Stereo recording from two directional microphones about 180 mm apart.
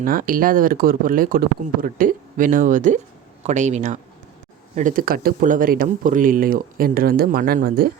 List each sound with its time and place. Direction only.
0.0 s speech: 50° right (ahead or behind)